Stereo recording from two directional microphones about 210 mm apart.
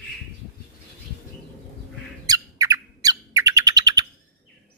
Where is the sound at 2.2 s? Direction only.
15° right (ahead or behind).